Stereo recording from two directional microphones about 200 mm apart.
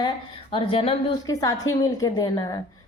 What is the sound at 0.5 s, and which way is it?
Speech, 25° left (ahead or behind).